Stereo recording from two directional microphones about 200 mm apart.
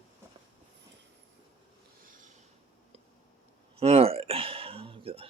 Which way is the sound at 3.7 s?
30° right (ahead or behind).